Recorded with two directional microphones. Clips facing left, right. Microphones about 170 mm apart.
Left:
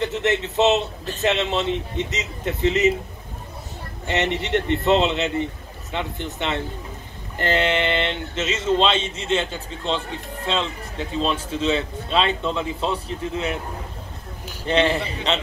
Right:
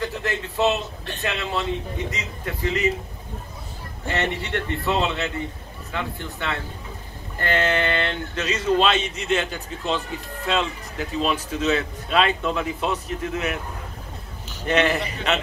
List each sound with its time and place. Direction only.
0.0 s speech: 25° left (ahead or behind)
4.1 s speech: 20° left (ahead or behind)
14.7 s speech: 30° left (ahead or behind)